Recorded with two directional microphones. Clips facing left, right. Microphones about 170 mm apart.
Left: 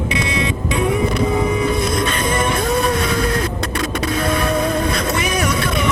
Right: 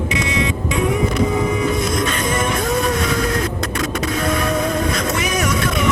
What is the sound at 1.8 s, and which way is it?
Music, 30° left (ahead or behind).